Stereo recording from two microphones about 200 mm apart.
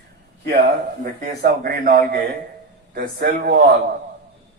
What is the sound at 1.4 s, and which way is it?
A man's voice, 45° right (ahead or behind).